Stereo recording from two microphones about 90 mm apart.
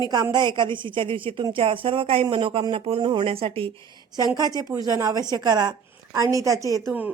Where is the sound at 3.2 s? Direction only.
90° right.